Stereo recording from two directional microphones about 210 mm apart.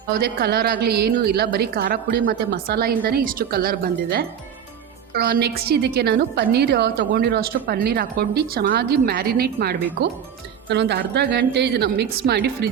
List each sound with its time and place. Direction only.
0.2 s a woman's voice: 50° right (ahead or behind)